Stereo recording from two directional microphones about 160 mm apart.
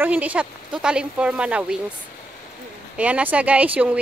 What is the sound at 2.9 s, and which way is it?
Speech, 10° right (ahead or behind).